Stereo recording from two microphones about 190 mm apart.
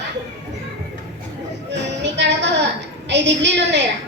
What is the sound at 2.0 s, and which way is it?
Music, 65° right (ahead or behind).